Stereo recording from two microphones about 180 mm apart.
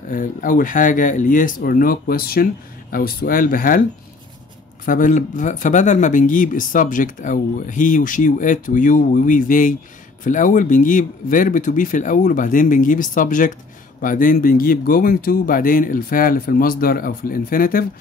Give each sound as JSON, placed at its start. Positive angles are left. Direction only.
{"t": 0.1, "sound": "speech", "side_deg": 45}
{"t": 4.8, "sound": "speech", "side_deg": 45}